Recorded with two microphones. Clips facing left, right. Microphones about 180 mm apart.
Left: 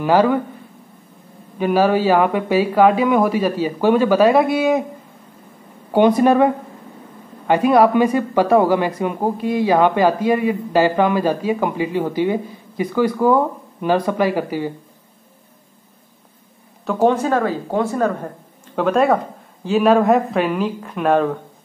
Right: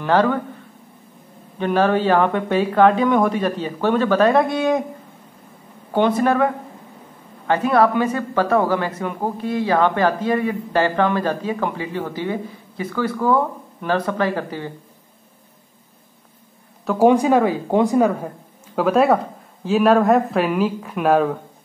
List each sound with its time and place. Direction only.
0.0 s speech: 10° left (ahead or behind)
1.6 s speech: 10° left (ahead or behind)
5.9 s speech: 15° left (ahead or behind)
16.8 s speech: 5° right (ahead or behind)
17.1 s a woman's voice: 15° right (ahead or behind)